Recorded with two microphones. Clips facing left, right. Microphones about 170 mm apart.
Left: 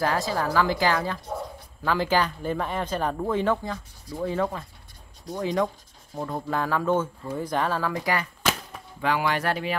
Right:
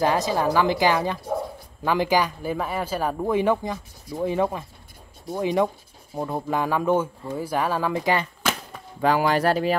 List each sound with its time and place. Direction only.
0.0 s speech: 20° right (ahead or behind)
7.9 s speech: 25° right (ahead or behind)
8.4 s a sound: centre (ahead or behind)
9.0 s speech: 40° right (ahead or behind)